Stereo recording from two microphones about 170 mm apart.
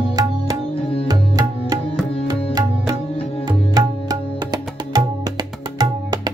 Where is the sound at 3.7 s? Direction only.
25° right (ahead or behind).